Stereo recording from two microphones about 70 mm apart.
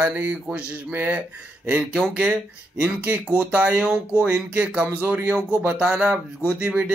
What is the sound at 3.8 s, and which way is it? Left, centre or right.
Speech, centre.